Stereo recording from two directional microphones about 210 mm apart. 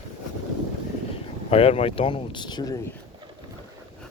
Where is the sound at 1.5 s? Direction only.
25° left (ahead or behind).